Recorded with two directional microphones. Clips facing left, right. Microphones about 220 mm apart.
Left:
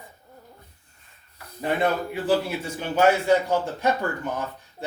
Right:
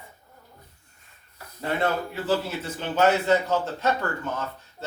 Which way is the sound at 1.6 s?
15° left (ahead or behind).